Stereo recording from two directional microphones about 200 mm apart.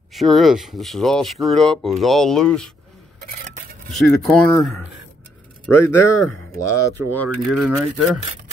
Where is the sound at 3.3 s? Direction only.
40° right (ahead or behind).